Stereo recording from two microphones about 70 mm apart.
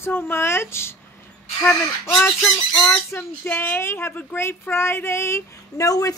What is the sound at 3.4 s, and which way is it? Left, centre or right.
Speech, left.